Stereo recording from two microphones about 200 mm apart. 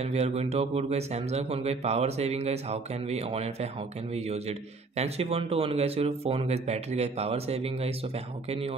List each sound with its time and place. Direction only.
0.0 s speech: 30° right (ahead or behind)